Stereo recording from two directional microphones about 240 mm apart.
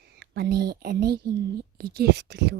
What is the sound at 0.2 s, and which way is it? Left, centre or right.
Speech, right.